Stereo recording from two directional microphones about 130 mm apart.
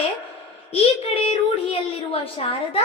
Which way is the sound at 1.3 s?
50° left (ahead or behind).